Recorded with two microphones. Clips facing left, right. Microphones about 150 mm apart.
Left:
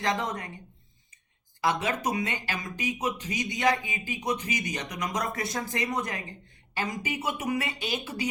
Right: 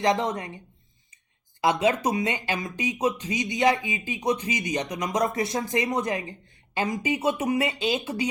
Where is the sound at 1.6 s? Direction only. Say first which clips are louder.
Right 5 dB; 20° right (ahead or behind).